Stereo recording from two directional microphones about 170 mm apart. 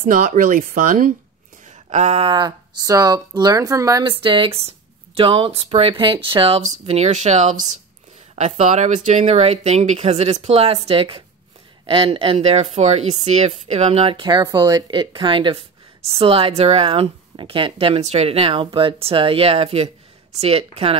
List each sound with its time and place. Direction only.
0.0 s speech: 55° right (ahead or behind)
1.9 s speech: 40° right (ahead or behind)